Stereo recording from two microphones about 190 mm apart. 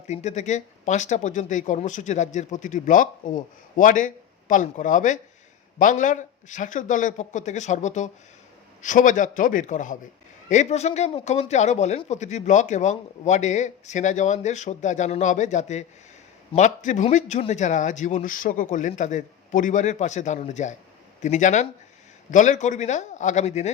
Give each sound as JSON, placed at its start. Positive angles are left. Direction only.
{"t": 0.1, "sound": "a man's voice", "side_deg": 35}